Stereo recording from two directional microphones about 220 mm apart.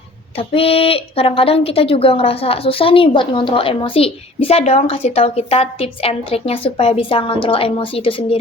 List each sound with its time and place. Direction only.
0.3 s speech: 25° left (ahead or behind)